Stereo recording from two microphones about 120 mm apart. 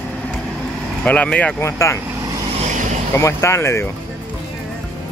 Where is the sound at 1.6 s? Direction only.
25° left (ahead or behind).